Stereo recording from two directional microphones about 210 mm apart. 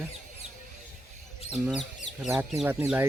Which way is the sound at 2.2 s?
Centre (ahead or behind).